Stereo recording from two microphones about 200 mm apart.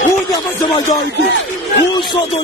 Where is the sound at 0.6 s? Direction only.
20° left (ahead or behind).